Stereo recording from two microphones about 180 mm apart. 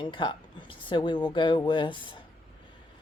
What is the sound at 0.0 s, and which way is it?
Speech, 25° left (ahead or behind).